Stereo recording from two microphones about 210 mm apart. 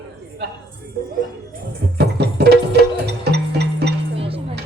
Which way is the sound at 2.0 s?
50° right (ahead or behind).